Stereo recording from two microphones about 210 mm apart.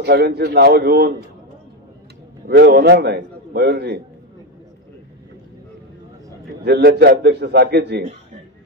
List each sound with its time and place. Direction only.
0.0 s a man's voice: 50° right (ahead or behind)
2.4 s a man's voice: 50° right (ahead or behind)
6.6 s a man's voice: 50° right (ahead or behind)